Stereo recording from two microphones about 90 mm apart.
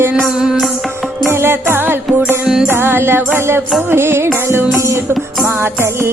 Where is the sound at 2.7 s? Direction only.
25° right (ahead or behind).